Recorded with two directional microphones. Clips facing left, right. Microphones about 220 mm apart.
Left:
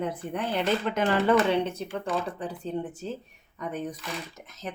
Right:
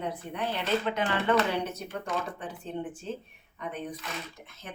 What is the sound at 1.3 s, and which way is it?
A woman's voice, 25° left (ahead or behind).